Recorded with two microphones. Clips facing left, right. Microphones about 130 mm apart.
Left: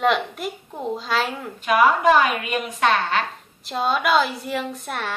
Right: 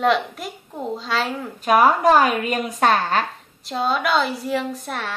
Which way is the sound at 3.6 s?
Centre (ahead or behind).